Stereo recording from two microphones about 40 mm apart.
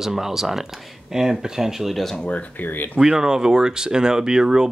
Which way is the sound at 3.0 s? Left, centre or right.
Centre.